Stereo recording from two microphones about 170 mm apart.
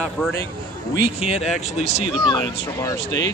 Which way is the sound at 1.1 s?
35° left (ahead or behind).